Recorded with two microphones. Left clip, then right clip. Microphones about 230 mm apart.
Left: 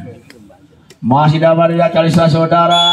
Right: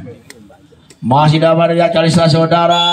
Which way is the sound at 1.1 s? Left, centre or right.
Right.